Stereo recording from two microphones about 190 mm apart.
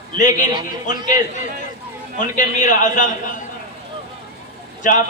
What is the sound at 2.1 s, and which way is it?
Speech, 45° left (ahead or behind).